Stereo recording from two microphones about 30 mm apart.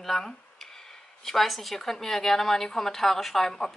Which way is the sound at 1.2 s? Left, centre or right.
Centre.